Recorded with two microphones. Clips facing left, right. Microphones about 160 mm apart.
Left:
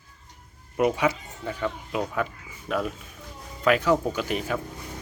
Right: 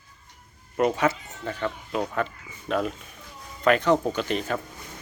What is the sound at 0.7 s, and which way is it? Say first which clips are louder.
Speech: even; 10° left (ahead or behind).